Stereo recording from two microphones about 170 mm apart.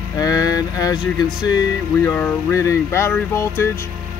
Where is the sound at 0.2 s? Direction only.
20° left (ahead or behind).